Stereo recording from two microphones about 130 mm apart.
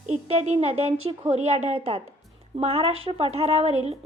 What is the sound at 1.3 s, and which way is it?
A child's voice, 55° right (ahead or behind).